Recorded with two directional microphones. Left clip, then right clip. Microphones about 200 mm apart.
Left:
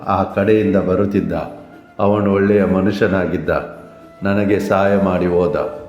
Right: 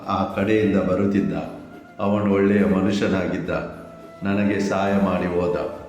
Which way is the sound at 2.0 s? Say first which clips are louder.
Left 5 dB; 35° left (ahead or behind).